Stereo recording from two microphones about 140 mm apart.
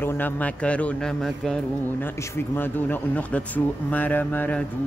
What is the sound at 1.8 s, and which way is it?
Speech, 15° left (ahead or behind).